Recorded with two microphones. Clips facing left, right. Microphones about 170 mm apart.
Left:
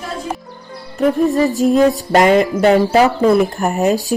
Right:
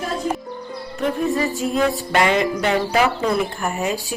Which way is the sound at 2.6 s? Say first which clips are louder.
Left 9 dB; 40° left (ahead or behind).